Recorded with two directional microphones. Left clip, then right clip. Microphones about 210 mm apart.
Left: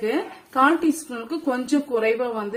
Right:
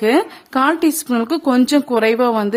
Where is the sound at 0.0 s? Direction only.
55° right (ahead or behind).